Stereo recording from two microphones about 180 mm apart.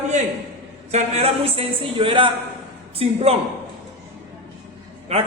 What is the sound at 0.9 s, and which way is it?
A man's voice, 35° right (ahead or behind).